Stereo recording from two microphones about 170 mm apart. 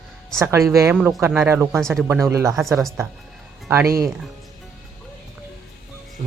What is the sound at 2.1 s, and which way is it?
Speech, 15° right (ahead or behind).